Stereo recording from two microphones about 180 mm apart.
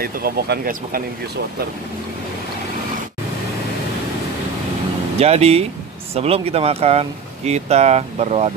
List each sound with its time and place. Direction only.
0.0 s speech: 55° right (ahead or behind)
5.2 s speech: 35° right (ahead or behind)